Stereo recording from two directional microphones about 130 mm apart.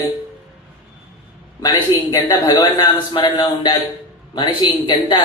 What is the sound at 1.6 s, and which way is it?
A man's voice, 30° left (ahead or behind).